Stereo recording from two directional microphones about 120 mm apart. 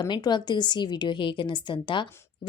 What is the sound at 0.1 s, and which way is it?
A woman's voice, 40° left (ahead or behind).